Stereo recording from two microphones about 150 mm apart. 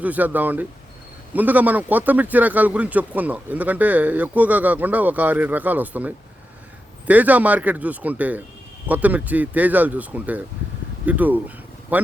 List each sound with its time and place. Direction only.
0.0 s speech: 10° right (ahead or behind)